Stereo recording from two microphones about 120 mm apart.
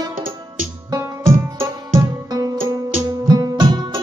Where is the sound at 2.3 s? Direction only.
30° right (ahead or behind).